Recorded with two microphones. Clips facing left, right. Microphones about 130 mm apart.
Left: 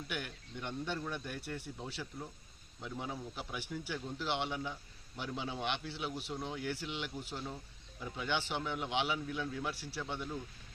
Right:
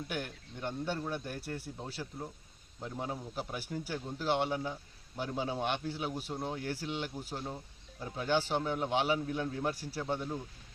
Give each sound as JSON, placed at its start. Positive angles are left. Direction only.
{"t": 0.1, "sound": "a man's voice", "side_deg": -45}